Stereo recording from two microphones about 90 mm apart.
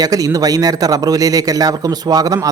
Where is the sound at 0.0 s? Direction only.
40° right (ahead or behind).